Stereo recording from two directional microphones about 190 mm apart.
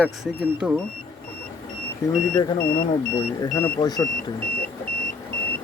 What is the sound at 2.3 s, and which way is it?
Speech, 15° left (ahead or behind).